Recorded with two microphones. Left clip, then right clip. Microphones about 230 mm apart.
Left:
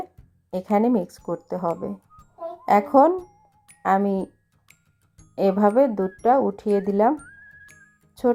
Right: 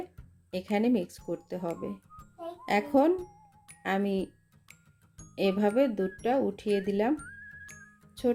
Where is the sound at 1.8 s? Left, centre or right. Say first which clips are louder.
Left 6 dB; centre.